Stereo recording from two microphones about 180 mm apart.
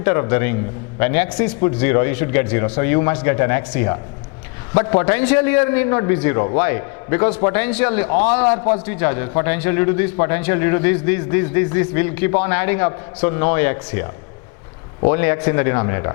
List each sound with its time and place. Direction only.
0.0 s a man's voice: 15° left (ahead or behind)